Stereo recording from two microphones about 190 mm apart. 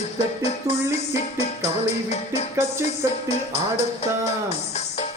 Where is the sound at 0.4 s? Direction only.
35° left (ahead or behind).